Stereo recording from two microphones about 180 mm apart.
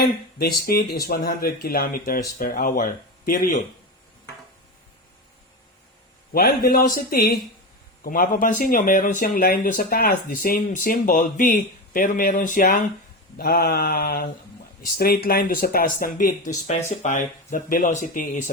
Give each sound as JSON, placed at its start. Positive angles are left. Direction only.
{"t": 0.3, "sound": "speech", "side_deg": 55}
{"t": 6.3, "sound": "speech", "side_deg": 55}